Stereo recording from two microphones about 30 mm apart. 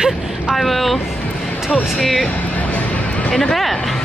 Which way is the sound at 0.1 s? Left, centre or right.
Centre.